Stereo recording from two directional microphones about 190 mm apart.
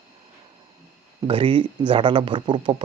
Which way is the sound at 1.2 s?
25° right (ahead or behind).